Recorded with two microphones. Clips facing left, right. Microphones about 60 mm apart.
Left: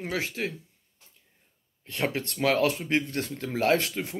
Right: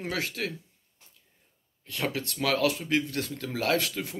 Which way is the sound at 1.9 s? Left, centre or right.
Left.